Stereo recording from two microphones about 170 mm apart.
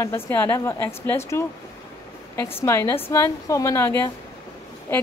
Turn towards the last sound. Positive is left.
turn(degrees=15)  # may be behind; listen again after turning